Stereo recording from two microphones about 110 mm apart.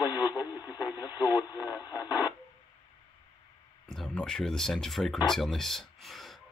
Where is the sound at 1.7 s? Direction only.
40° left (ahead or behind).